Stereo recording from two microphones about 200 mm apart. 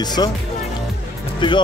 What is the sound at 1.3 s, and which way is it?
Speech, 25° left (ahead or behind).